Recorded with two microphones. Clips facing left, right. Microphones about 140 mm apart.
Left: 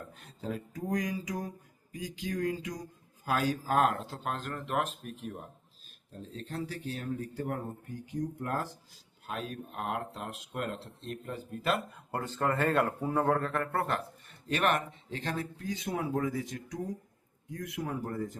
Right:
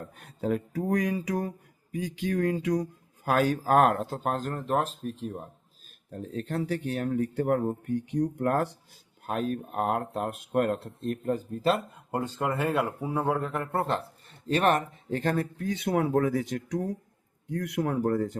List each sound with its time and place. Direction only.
0.2 s speech: 60° right (ahead or behind); by 5.4 s 30° right (ahead or behind)
6.1 s speech: 65° right (ahead or behind)
9.2 s speech: 45° right (ahead or behind)
11.6 s speech: 25° right (ahead or behind); by 18.3 s 80° right